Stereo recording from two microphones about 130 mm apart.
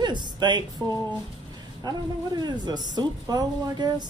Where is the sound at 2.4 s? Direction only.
30° right (ahead or behind).